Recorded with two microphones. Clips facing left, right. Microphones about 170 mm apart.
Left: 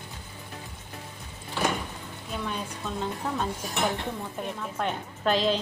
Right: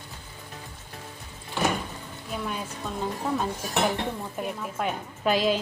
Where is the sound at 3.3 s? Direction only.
5° right (ahead or behind).